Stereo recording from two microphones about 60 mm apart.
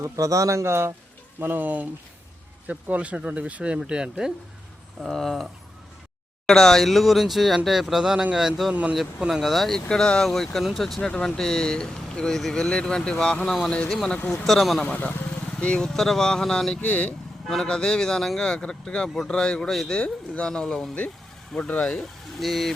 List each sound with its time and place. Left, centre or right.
0.0 s a man's voice: right
1.4 s speech: right; by 4.3 s centre
5.0 s speech: centre
6.5 s speech: centre
8.7 s speech: centre
9.3 s speech: centre
13.9 s speech: centre
14.8 s speech: left
15.5 s speech: centre
16.8 s speech: left
17.5 s speech: centre
19.7 s speech: centre
20.0 s speech: centre
22.4 s speech: centre